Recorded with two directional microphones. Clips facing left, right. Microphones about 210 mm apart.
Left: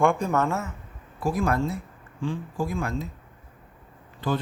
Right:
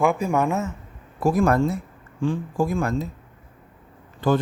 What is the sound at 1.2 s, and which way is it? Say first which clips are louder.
Speech: right 6 dB; 45° right (ahead or behind).